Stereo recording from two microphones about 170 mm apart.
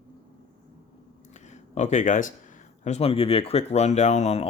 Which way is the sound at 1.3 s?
45° left (ahead or behind).